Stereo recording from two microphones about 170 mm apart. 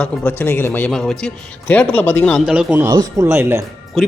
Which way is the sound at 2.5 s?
5° right (ahead or behind).